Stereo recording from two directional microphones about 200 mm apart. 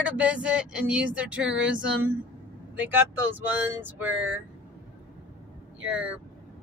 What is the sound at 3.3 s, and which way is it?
Speech, 10° right (ahead or behind).